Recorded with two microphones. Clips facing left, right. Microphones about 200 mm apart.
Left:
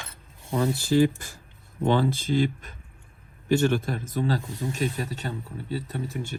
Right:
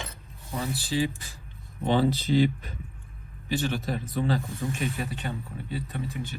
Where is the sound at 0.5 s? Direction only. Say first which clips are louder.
Left 7 dB; 50° left (ahead or behind).